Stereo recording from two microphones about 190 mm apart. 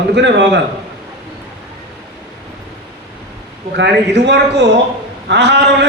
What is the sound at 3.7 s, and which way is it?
A man's voice, 65° right (ahead or behind).